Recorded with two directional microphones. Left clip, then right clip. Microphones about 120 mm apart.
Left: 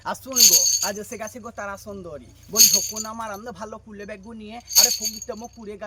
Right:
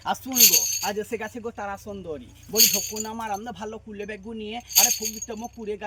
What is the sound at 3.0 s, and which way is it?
Speech, 35° left (ahead or behind).